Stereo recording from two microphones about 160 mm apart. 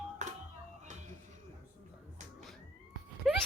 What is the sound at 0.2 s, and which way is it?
Music, 50° right (ahead or behind).